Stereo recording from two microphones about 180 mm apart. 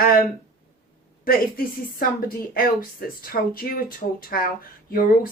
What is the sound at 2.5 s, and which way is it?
Speech, 55° left (ahead or behind).